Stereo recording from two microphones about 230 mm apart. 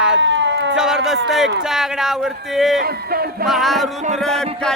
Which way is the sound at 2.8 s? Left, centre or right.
Right.